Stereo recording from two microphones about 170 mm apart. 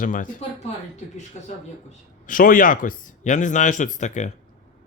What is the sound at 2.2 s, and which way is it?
Speech, 55° left (ahead or behind).